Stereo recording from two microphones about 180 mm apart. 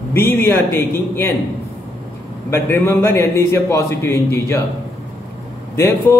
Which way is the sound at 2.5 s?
15° left (ahead or behind).